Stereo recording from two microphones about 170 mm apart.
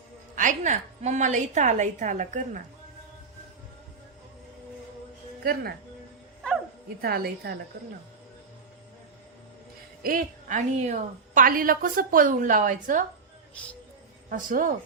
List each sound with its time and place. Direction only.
0.3 s a woman's voice: 45° right (ahead or behind)
5.4 s speech: 60° right (ahead or behind)
7.0 s a woman's voice: 60° right (ahead or behind)
10.0 s a woman's voice: 55° right (ahead or behind)
14.3 s a woman's voice: 55° right (ahead or behind)